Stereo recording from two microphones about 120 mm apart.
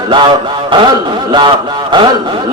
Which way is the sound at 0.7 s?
40° right (ahead or behind).